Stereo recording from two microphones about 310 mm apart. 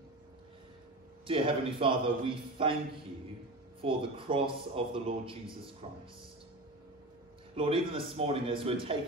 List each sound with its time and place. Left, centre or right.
1.2 s speech: centre
3.8 s speech: centre
7.5 s speech: centre